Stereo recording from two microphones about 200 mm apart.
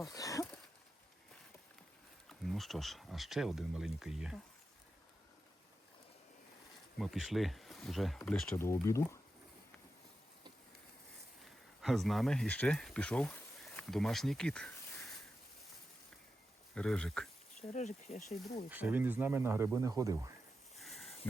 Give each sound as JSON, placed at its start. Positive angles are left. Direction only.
{"t": 0.1, "sound": "a sound", "side_deg": 15}
{"t": 2.4, "sound": "speech", "side_deg": 0}
{"t": 7.0, "sound": "speech", "side_deg": 0}
{"t": 8.5, "sound": "speech", "side_deg": 15}
{"t": 11.8, "sound": "speech", "side_deg": 0}
{"t": 16.7, "sound": "speech", "side_deg": 5}
{"t": 17.6, "sound": "speech", "side_deg": 35}
{"t": 18.7, "sound": "speech", "side_deg": -10}
{"t": 20.7, "sound": "a sound", "side_deg": 0}